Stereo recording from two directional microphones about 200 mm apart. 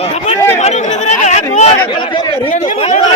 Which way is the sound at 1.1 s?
35° left (ahead or behind).